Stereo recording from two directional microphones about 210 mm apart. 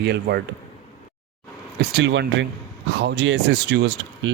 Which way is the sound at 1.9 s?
60° right (ahead or behind).